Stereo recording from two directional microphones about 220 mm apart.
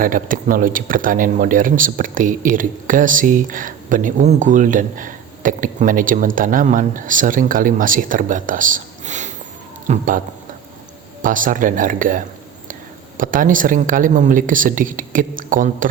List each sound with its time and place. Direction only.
0.0 s speech: 40° right (ahead or behind)
11.2 s speech: 40° right (ahead or behind)